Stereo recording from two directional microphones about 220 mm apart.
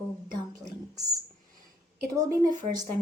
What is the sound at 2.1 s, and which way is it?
Speech, 15° right (ahead or behind).